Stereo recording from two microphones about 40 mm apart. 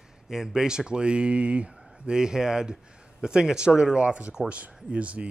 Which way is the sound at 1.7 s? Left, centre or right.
Centre.